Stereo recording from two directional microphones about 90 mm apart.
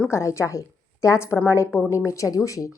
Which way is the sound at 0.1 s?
30° left (ahead or behind).